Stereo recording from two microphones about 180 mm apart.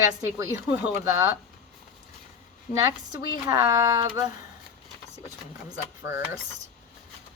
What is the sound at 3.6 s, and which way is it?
Speech, 15° right (ahead or behind).